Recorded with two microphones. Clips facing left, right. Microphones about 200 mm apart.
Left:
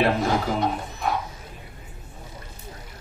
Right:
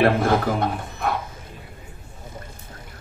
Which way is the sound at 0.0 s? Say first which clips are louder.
Right 3 dB; 55° right (ahead or behind).